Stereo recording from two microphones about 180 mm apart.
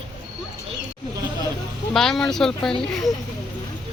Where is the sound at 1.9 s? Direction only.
Centre (ahead or behind).